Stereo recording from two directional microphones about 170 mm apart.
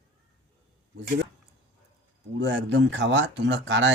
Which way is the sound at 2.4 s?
90° right.